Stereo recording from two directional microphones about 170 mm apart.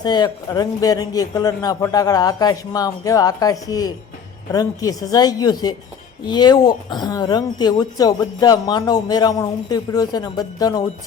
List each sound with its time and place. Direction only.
0.0 s a woman's voice: 25° left (ahead or behind)